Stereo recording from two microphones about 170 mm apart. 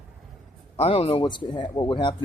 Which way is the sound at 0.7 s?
35° left (ahead or behind).